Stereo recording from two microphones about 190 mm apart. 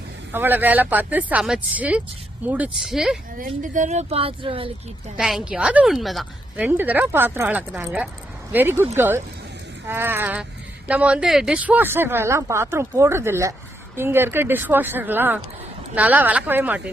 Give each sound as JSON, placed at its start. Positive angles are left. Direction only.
{"t": 0.3, "sound": "a woman's voice", "side_deg": -10}
{"t": 3.6, "sound": "a woman's voice", "side_deg": -40}
{"t": 5.1, "sound": "a woman's voice", "side_deg": -5}